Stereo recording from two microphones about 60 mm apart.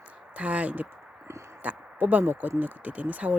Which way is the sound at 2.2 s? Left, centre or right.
Right.